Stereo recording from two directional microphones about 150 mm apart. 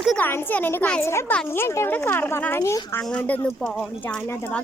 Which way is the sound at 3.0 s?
10° left (ahead or behind).